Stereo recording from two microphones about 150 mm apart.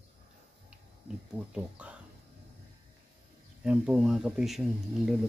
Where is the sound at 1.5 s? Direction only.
10° right (ahead or behind).